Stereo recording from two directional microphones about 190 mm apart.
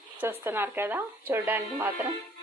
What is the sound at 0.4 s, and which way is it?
Speech, 10° right (ahead or behind).